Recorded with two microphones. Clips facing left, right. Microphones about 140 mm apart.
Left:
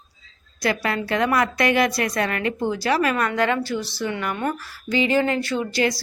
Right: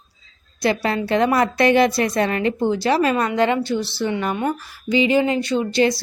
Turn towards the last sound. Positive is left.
turn(degrees=-25)  # may be behind; listen again after turning